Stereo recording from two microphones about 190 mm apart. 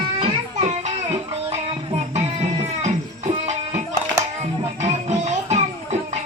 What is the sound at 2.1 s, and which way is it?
Music, 35° right (ahead or behind).